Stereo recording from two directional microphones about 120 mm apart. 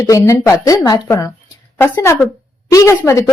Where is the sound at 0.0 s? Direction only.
25° left (ahead or behind).